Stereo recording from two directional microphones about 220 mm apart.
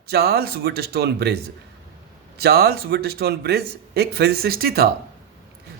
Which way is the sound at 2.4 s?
45° right (ahead or behind).